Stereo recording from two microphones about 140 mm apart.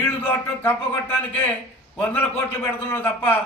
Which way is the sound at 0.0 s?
15° left (ahead or behind).